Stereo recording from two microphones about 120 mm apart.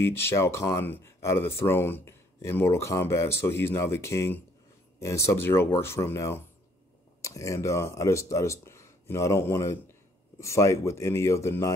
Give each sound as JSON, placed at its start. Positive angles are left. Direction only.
{"t": 0.0, "sound": "speech", "side_deg": 20}